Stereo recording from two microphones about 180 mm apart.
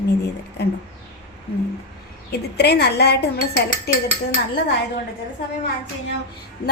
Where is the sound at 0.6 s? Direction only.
65° left (ahead or behind).